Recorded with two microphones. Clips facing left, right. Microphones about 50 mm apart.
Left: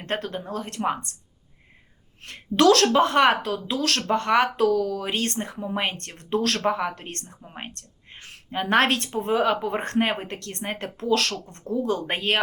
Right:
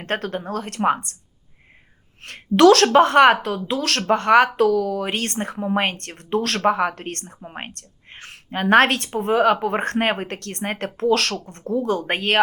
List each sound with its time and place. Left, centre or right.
0.0 s speech: right
2.2 s speech: right
7.1 s speech: right
7.4 s speech: right
7.7 s speech: right